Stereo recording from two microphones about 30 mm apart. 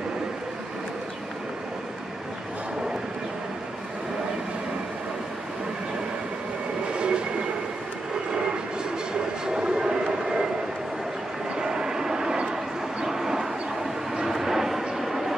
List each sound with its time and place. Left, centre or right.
6.9 s train: right
9.5 s vehicle: right
11.5 s vehicle: right
13.0 s dog: centre
14.1 s a sound: centre